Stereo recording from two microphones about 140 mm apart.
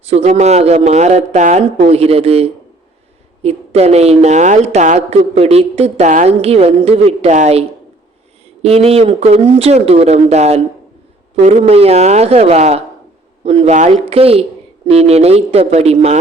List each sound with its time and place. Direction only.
0.1 s a woman's voice: 50° right (ahead or behind)
8.6 s a woman's voice: 50° right (ahead or behind)